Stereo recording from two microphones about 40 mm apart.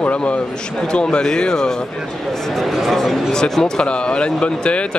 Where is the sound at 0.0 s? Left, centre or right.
Left; by 1.8 s centre.